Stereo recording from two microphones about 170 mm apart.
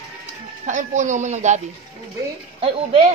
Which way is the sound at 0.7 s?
45° right (ahead or behind).